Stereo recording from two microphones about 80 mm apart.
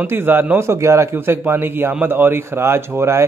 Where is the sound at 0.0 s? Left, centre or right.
Right.